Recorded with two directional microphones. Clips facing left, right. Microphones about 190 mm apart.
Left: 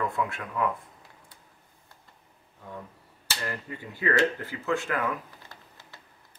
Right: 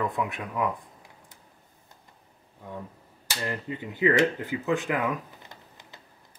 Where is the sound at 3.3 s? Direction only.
20° right (ahead or behind).